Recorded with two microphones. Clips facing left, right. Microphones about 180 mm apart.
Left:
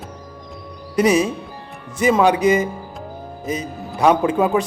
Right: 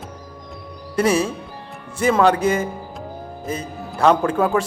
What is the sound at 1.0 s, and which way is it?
A man's voice, 15° left (ahead or behind).